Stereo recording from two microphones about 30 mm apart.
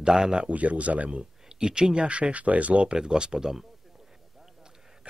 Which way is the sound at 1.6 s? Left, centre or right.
Right.